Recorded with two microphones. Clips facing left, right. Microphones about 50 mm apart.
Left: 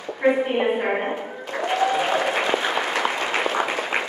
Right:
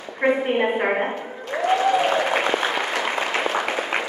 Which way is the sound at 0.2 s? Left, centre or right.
Centre.